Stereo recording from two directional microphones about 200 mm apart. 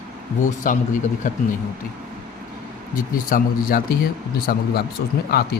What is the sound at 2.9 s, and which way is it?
Speech, 45° left (ahead or behind).